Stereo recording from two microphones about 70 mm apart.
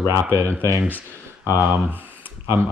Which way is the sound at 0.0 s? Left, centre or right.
Right.